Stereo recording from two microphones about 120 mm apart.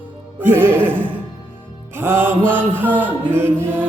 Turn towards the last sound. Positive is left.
turn(degrees=-20)  # may be behind; listen again after turning